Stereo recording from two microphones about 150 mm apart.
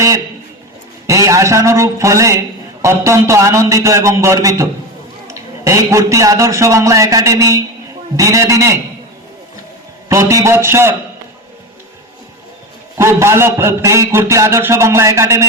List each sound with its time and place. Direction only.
1.0 s a man's voice: 20° right (ahead or behind)
10.1 s a man's voice: 20° right (ahead or behind)
13.0 s a man's voice: 20° right (ahead or behind)